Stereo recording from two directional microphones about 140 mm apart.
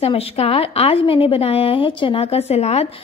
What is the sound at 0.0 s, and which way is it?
A woman's voice, 45° left (ahead or behind).